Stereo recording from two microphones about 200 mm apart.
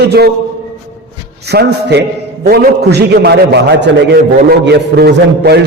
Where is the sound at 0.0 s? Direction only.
55° right (ahead or behind).